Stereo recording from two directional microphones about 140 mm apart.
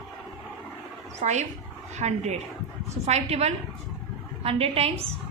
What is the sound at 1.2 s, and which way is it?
A woman's voice, 55° right (ahead or behind).